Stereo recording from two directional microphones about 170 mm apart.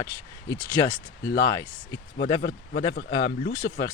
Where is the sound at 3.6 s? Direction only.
90° left.